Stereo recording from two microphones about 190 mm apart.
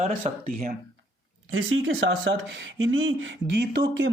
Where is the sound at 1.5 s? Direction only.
90° right.